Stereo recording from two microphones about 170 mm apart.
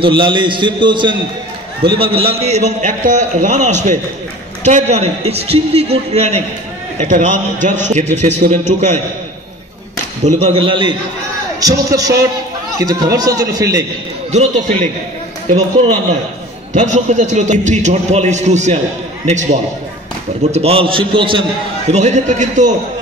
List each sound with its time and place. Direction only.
0.0 s a man's voice: 30° right (ahead or behind)
10.2 s a man's voice: 35° right (ahead or behind)
15.5 s a man's voice: 40° right (ahead or behind)
20.5 s a man's voice: 35° right (ahead or behind)
21.9 s a man's voice: 45° right (ahead or behind)